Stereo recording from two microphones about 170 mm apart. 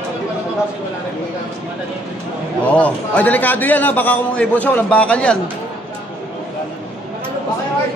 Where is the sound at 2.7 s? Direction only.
10° left (ahead or behind).